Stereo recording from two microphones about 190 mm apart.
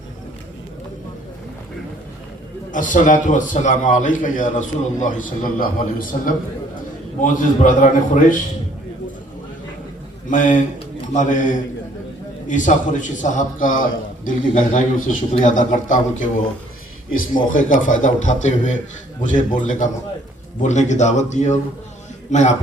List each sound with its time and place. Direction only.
2.7 s a man's voice: 45° left (ahead or behind)
10.2 s a man's voice: 40° left (ahead or behind)
17.1 s a man's voice: 45° left (ahead or behind)